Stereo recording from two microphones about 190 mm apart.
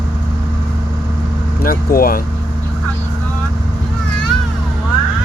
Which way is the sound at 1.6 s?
50° left (ahead or behind).